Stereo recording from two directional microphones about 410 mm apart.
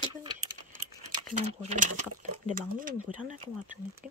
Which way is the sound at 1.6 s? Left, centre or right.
Centre.